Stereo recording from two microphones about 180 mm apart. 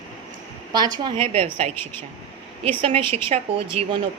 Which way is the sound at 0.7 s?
20° right (ahead or behind).